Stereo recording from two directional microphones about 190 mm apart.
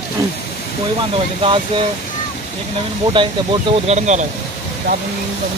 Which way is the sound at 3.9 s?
40° right (ahead or behind).